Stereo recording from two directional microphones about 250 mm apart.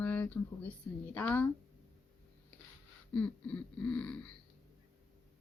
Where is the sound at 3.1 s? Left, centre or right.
Centre.